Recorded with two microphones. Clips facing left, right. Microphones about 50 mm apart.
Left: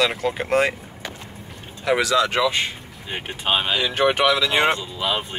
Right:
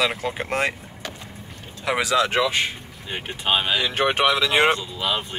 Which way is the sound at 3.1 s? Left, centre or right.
Centre.